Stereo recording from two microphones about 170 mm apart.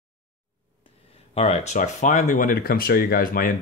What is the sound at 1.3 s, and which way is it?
Speech, 40° left (ahead or behind).